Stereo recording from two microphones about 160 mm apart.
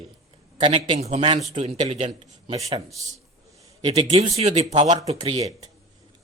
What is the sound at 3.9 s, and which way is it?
A man's voice, 40° right (ahead or behind).